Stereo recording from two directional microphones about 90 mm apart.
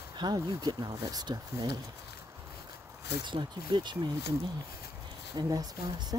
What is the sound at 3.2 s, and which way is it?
Speech, 60° right (ahead or behind).